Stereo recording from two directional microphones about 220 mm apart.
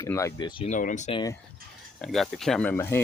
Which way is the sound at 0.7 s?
35° left (ahead or behind).